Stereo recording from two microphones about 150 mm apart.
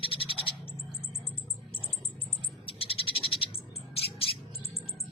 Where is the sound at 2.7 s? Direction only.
40° left (ahead or behind).